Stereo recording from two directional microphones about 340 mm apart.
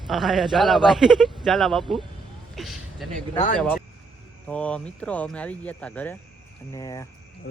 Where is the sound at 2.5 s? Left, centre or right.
Centre.